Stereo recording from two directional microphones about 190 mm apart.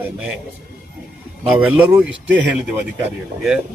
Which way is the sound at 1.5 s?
10° right (ahead or behind).